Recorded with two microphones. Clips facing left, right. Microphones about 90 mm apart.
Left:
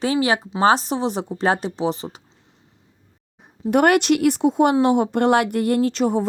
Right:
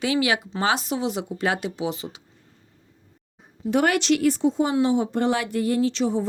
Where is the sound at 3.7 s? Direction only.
55° left (ahead or behind).